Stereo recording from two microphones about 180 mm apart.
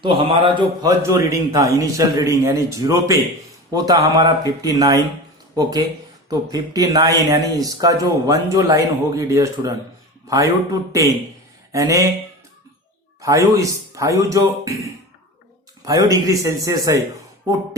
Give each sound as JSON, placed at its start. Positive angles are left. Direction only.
{"t": 0.0, "sound": "speech", "side_deg": -30}
{"t": 6.2, "sound": "speech", "side_deg": -20}
{"t": 13.2, "sound": "speech", "side_deg": -20}